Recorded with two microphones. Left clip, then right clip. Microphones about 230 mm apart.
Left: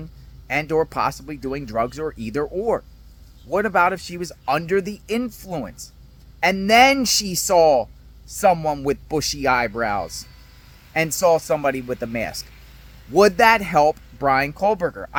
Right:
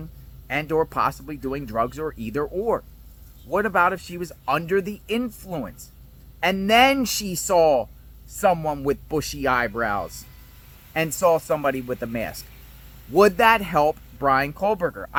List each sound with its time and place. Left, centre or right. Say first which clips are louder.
0.0 s speech: left 2 dB; left
11.2 s speech: left 2 dB; centre